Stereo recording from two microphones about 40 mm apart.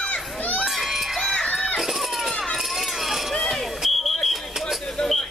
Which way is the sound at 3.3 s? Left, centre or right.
Centre.